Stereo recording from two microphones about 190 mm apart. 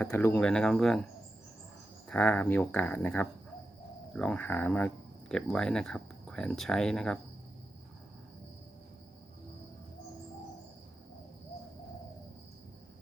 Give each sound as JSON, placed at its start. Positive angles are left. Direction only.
{"t": 0.0, "sound": "speech", "side_deg": 15}
{"t": 2.0, "sound": "speech", "side_deg": 10}